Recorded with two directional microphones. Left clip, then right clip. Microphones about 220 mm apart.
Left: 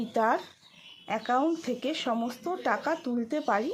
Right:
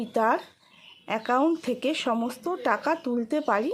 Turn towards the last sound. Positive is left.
turn(degrees=-20)  # may be behind; listen again after turning